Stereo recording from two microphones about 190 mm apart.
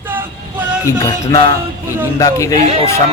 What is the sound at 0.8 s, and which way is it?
Music, 20° left (ahead or behind).